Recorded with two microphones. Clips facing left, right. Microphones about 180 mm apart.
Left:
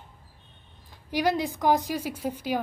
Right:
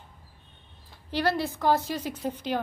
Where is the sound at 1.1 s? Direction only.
15° left (ahead or behind).